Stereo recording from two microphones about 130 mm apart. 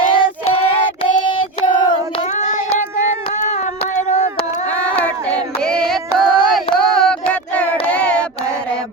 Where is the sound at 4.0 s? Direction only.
65° left (ahead or behind).